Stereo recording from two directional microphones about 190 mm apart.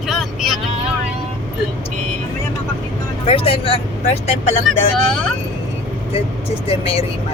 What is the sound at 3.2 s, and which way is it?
Speech, 30° left (ahead or behind).